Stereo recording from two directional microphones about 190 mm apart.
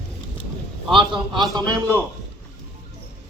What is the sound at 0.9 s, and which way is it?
Speech, 25° right (ahead or behind).